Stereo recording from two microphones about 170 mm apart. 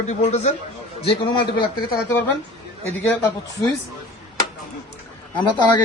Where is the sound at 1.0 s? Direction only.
30° left (ahead or behind).